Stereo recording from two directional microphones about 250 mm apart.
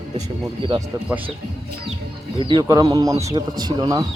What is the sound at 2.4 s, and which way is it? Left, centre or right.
Speech, centre.